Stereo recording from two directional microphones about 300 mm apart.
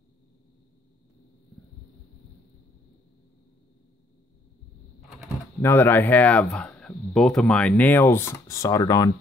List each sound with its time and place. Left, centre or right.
5.2 s speech: centre